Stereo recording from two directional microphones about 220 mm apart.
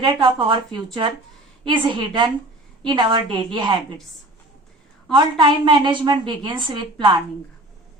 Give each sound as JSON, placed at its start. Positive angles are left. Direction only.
{"t": 0.0, "sound": "a woman's voice", "side_deg": -25}
{"t": 5.1, "sound": "a woman's voice", "side_deg": -20}